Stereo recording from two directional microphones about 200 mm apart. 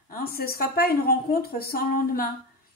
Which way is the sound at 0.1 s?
50° left (ahead or behind).